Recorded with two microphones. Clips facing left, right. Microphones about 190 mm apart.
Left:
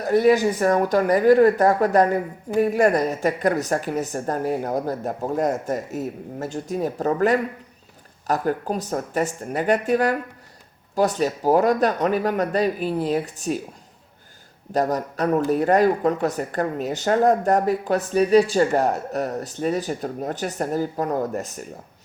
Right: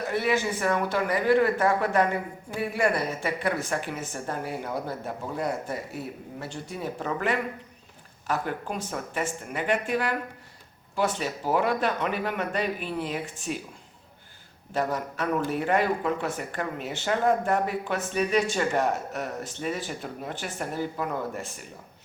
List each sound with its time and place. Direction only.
0.0 s speech: 40° left (ahead or behind)
14.7 s speech: 40° left (ahead or behind)